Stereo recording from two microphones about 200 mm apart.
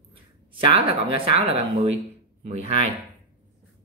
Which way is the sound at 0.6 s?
25° right (ahead or behind).